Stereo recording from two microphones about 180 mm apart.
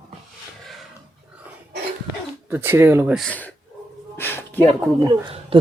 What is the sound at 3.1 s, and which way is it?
Speech, 5° left (ahead or behind).